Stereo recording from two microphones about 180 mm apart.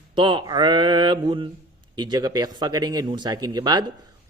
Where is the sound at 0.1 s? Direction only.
25° right (ahead or behind).